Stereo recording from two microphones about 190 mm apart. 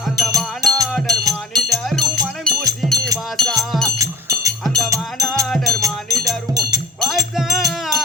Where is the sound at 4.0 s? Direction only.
20° right (ahead or behind).